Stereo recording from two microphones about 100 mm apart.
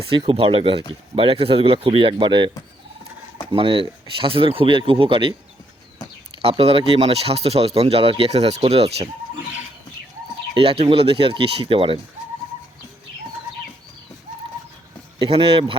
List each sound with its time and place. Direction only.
0.1 s speech: 70° right (ahead or behind)
3.5 s speech: 60° right (ahead or behind)
6.4 s speech: 85° right
10.5 s speech: 70° right (ahead or behind)
15.2 s speech: 65° right (ahead or behind)